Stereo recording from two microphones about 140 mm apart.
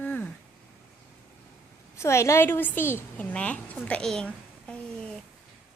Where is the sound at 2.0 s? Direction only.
20° left (ahead or behind).